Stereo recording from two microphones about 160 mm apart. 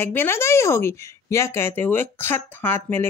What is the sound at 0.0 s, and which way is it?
Speech, 15° left (ahead or behind).